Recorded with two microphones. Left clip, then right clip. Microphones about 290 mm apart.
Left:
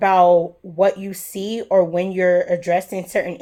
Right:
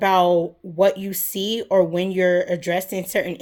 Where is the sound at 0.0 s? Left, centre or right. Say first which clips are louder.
Left 4 dB; right.